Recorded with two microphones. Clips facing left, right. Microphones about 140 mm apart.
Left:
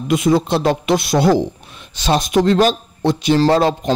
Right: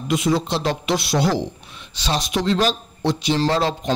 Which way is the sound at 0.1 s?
50° left (ahead or behind).